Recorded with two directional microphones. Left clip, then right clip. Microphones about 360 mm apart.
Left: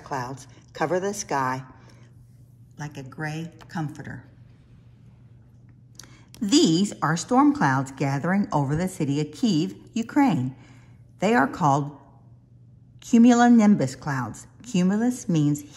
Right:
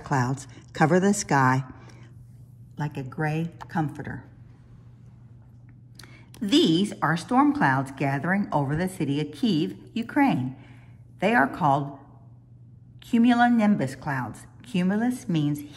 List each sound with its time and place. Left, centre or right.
0.0 s a woman's voice: centre
2.8 s speech: centre
5.9 s speech: centre
13.0 s a woman's voice: centre